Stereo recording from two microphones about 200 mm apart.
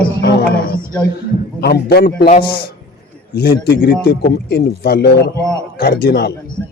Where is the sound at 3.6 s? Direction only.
55° left (ahead or behind).